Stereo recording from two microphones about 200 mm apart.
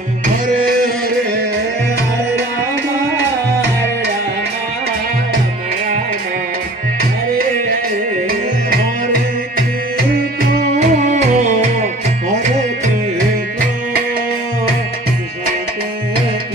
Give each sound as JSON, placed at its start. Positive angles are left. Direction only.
{"t": 9.9, "sound": "music", "side_deg": -50}
{"t": 10.8, "sound": "music", "side_deg": -35}